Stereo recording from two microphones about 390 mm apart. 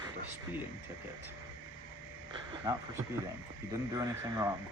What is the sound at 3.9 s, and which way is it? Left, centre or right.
Speech, centre.